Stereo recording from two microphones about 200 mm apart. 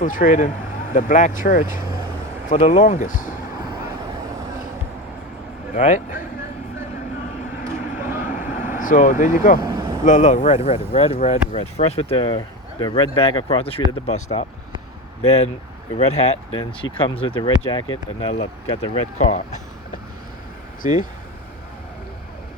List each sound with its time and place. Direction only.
0.0 s speech: 40° left (ahead or behind)
5.7 s speech: 40° left (ahead or behind)
7.6 s vehicle: 10° right (ahead or behind)
8.7 s speech: 40° left (ahead or behind)
9.6 s vehicle: 20° right (ahead or behind)
10.0 s speech: 35° left (ahead or behind)
16.0 s speech: 35° left (ahead or behind)